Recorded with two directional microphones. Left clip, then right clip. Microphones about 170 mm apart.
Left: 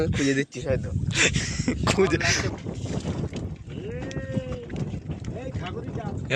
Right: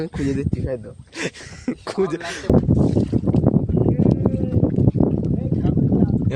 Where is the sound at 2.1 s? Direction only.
25° right (ahead or behind).